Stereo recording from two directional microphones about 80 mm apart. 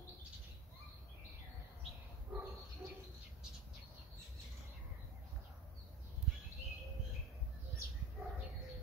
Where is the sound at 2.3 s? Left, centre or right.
Centre.